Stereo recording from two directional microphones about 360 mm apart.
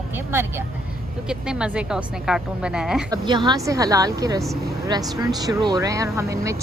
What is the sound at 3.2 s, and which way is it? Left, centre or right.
Speech, centre.